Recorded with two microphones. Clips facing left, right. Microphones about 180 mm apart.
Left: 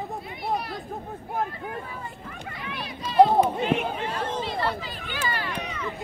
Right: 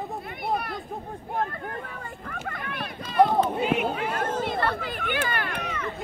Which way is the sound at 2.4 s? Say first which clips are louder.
Right 1 dB; 50° right (ahead or behind).